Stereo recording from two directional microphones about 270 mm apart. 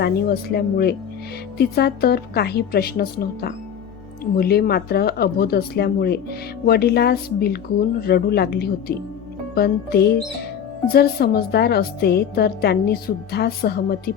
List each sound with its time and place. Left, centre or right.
0.0 s a woman's voice: left